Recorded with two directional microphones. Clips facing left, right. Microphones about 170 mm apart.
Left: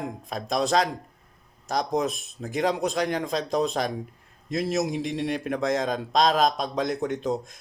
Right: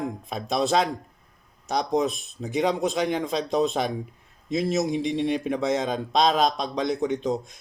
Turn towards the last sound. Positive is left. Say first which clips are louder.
# right 1 dB
turn(degrees=0)  # may be behind; listen again after turning